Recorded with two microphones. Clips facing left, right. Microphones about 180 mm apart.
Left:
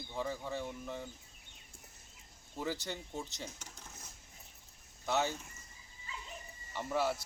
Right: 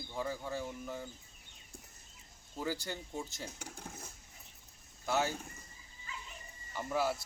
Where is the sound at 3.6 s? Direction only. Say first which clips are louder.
Right 7 dB; 55° right (ahead or behind).